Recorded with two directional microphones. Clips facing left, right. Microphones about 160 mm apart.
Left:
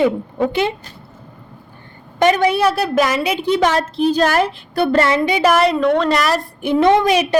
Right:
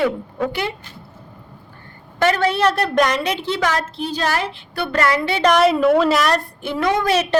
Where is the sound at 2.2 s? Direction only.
15° left (ahead or behind).